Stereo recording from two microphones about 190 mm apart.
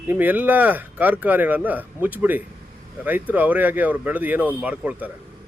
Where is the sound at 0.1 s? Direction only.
10° right (ahead or behind).